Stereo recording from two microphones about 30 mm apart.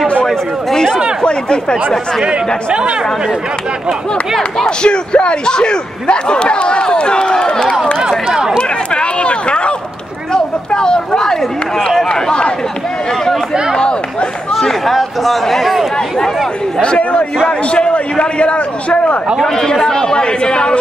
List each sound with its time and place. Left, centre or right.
1.2 s speech: left
2.2 s speech: right
4.6 s speech: left
8.1 s run: centre
8.5 s run: left
10.3 s a sound: left
14.5 s speech: centre
16.8 s speech: left
19.3 s speech: centre; by 20.8 s left